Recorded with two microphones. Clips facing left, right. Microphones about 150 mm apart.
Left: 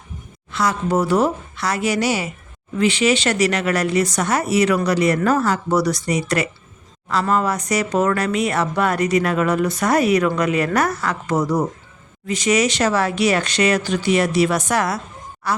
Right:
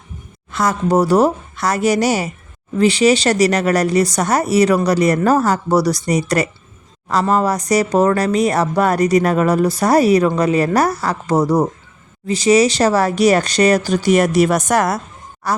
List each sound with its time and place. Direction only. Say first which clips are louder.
0.5 s a woman's voice: right 4 dB; 45° right (ahead or behind)